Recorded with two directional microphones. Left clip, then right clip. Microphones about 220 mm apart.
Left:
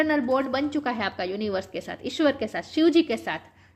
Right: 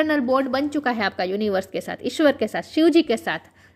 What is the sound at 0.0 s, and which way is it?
A woman's voice, 40° right (ahead or behind).